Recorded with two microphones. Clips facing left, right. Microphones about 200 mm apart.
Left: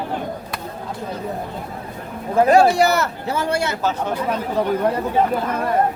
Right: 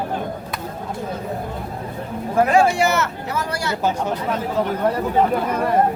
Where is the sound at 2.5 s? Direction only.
35° left (ahead or behind).